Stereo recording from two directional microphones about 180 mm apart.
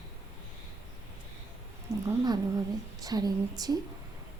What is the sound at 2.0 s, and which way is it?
Speech, 20° right (ahead or behind).